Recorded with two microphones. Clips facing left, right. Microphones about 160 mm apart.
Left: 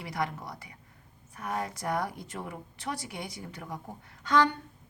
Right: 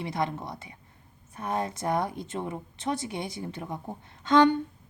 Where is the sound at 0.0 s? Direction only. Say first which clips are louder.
Right 4 dB; 25° right (ahead or behind).